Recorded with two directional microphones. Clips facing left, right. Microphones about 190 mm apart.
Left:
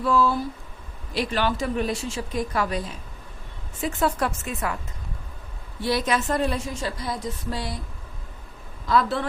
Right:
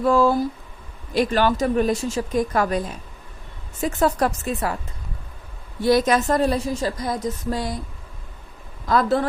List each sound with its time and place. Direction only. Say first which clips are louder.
0.0 s a woman's voice: right 4 dB; 45° right (ahead or behind)
5.8 s a woman's voice: right 6 dB; 45° right (ahead or behind)
8.9 s a woman's voice: right 3 dB; 45° right (ahead or behind)